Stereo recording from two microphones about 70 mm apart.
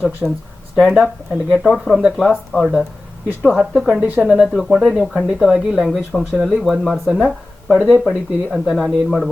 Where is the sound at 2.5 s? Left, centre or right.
Left.